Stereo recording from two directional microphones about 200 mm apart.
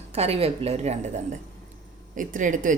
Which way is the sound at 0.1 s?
30° right (ahead or behind).